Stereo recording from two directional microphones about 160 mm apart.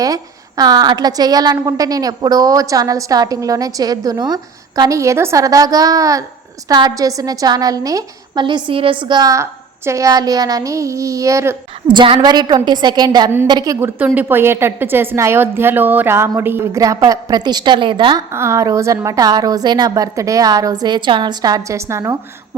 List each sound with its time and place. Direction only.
0.0 s a woman's voice: 25° right (ahead or behind)
11.9 s a woman's voice: 30° right (ahead or behind)
13.7 s a woman's voice: 15° right (ahead or behind); by 18.2 s 30° right (ahead or behind)
18.3 s a woman's voice: 15° right (ahead or behind)